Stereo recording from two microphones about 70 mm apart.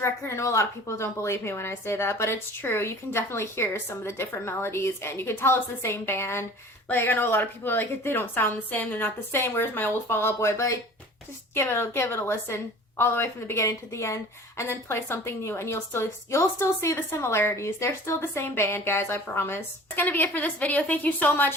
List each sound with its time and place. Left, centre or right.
0.0 s a woman's voice: left